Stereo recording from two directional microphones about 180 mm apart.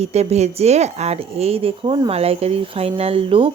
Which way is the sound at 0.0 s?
35° right (ahead or behind).